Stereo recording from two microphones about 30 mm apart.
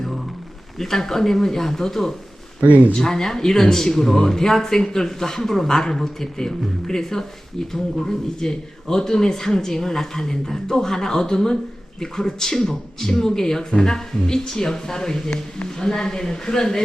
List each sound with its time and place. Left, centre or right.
0.8 s speech: centre
2.6 s speech: right
2.9 s speech: left